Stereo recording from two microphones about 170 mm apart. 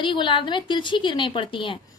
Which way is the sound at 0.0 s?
30° left (ahead or behind).